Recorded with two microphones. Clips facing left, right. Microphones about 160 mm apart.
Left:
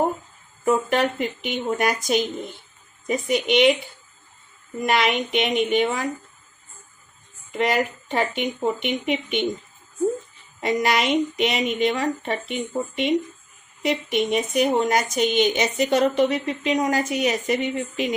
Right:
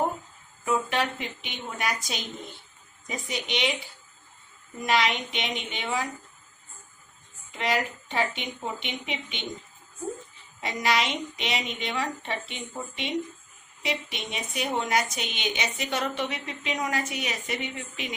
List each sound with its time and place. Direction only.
0.6 s a woman's voice: 50° left (ahead or behind)
4.9 s a woman's voice: 55° left (ahead or behind)
7.5 s a woman's voice: 50° left (ahead or behind)
10.6 s a woman's voice: 50° left (ahead or behind)